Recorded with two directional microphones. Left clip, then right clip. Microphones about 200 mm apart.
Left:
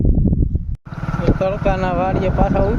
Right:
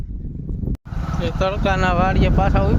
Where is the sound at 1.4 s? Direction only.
Centre (ahead or behind).